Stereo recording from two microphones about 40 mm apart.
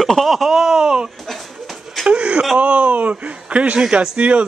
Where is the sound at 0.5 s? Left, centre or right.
Centre.